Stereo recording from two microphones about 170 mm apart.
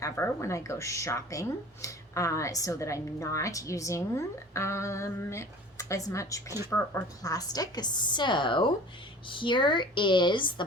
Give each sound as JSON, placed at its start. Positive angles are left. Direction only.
{"t": 0.0, "sound": "a woman's voice", "side_deg": 15}